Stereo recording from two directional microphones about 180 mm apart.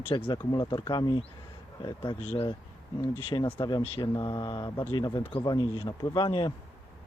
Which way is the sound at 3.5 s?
25° left (ahead or behind).